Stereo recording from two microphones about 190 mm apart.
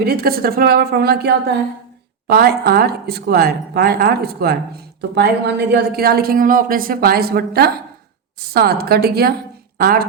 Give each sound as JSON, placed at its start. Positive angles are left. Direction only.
{"t": 0.0, "sound": "a woman's voice", "side_deg": -55}